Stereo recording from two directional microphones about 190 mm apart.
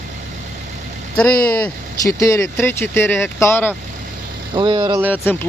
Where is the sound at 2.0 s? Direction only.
15° left (ahead or behind).